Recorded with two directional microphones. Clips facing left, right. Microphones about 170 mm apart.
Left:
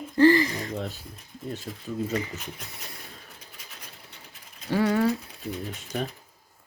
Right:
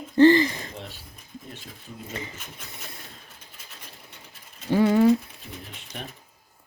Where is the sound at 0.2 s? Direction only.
25° right (ahead or behind).